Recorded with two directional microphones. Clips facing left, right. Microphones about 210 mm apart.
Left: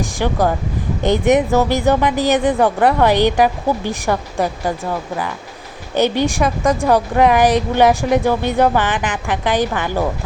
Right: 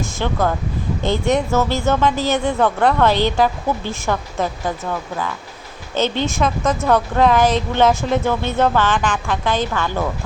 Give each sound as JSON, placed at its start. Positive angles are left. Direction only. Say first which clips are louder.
{"t": 0.0, "sound": "speech", "louder": "left 3 dB", "side_deg": 15}